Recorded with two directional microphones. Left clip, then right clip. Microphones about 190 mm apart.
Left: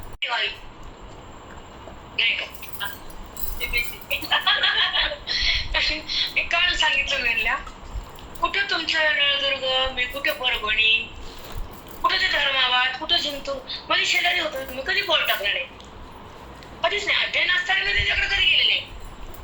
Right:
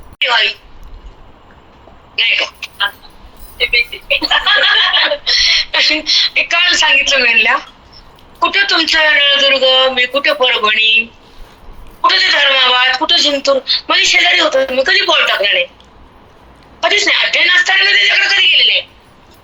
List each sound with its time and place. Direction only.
0.2 s a sound: 45° right (ahead or behind)
2.1 s speech: 45° right (ahead or behind)
12.0 s speech: 45° right (ahead or behind)
16.8 s speech: 45° right (ahead or behind)